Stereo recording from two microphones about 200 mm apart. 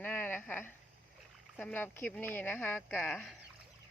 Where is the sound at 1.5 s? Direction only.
10° left (ahead or behind).